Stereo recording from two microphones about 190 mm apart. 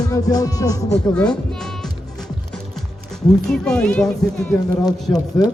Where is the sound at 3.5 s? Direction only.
5° left (ahead or behind).